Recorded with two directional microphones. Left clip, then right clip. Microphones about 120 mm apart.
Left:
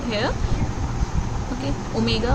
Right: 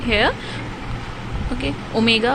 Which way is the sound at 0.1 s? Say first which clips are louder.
Right 7 dB; 25° right (ahead or behind).